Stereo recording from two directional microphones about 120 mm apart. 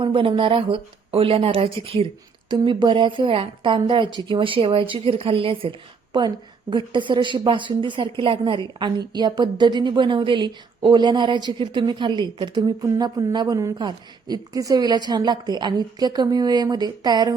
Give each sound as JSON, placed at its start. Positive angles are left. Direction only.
{"t": 0.0, "sound": "a woman's voice", "side_deg": -45}
{"t": 2.5, "sound": "a woman's voice", "side_deg": -40}